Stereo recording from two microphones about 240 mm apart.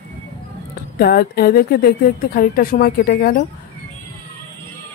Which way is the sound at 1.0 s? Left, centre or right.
Left.